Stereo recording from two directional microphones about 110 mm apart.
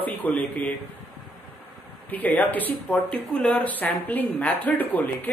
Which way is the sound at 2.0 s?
15° left (ahead or behind).